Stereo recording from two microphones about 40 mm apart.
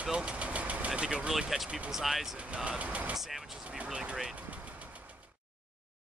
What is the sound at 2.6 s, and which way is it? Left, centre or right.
Speech, right.